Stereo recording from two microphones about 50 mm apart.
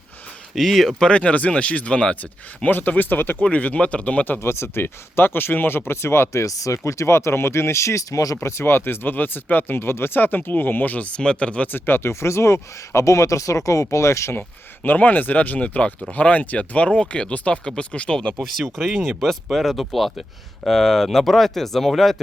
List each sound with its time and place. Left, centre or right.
0.5 s speech: centre
0.9 s speech: left
2.6 s speech: left
3.4 s speech: left
4.4 s speech: left
8.4 s speech: left
11.2 s speech: left
11.7 s speech: left
14.8 s speech: left; by 18.4 s centre
18.4 s speech: centre